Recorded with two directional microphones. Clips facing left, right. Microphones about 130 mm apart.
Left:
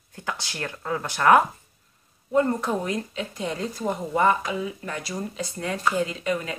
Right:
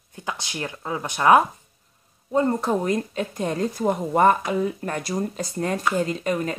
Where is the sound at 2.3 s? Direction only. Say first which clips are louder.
Right 1 dB; 25° right (ahead or behind).